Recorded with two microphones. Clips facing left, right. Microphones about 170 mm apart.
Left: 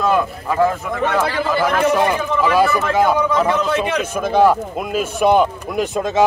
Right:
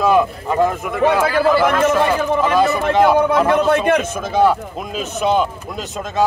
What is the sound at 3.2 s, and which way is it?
Speech, 55° right (ahead or behind).